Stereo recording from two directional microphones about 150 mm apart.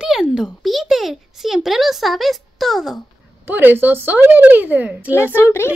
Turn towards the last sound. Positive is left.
turn(degrees=15)  # may be behind; listen again after turning